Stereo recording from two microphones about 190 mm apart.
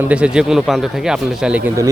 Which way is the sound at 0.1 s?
5° right (ahead or behind).